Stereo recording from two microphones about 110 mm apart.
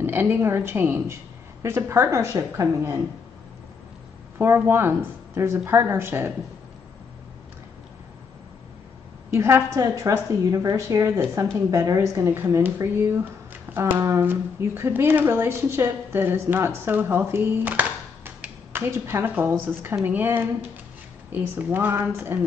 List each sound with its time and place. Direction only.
0.0 s speech: 20° right (ahead or behind)
4.4 s speech: 20° right (ahead or behind)
9.3 s a woman's voice: 25° right (ahead or behind)